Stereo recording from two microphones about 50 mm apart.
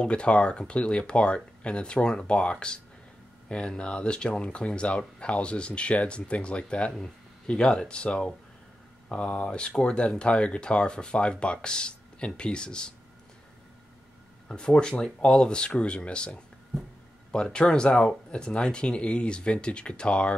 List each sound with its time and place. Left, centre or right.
0.0 s speech: left
14.5 s speech: centre
17.3 s speech: centre